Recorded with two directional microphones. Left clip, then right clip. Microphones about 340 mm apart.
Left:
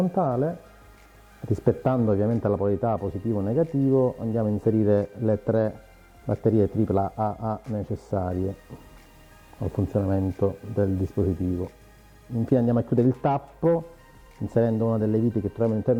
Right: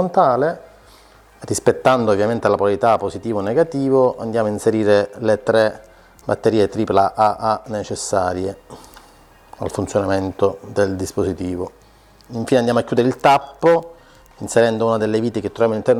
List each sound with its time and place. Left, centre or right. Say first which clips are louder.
0.0 s speech: right 10 dB; centre
1.5 s speech: right 9 dB; centre
7.9 s speech: right 9 dB; centre
8.1 s speech: right 10 dB; centre
9.6 s speech: right 8 dB; centre
12.5 s speech: right 8 dB; centre